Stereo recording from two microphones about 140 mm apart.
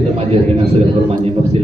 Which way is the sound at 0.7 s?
45° right (ahead or behind).